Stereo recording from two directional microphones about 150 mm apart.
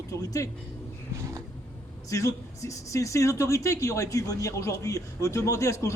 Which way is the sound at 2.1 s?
20° left (ahead or behind).